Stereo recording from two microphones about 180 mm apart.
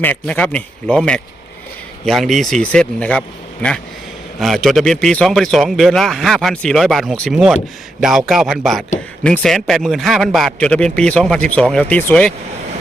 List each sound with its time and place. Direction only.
0.0 s a man's voice: 10° left (ahead or behind)